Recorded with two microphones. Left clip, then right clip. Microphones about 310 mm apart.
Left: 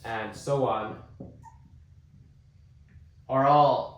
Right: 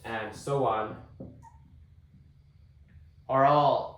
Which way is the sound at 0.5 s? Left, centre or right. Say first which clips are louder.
Left 2 dB; centre.